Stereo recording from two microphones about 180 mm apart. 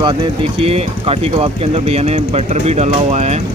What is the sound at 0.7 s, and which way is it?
Speech, 35° right (ahead or behind).